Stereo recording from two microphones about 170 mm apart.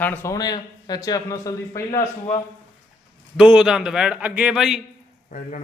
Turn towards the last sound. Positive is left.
turn(degrees=50)  # may be behind; listen again after turning